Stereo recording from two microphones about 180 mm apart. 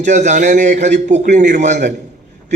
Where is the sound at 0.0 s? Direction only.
40° right (ahead or behind).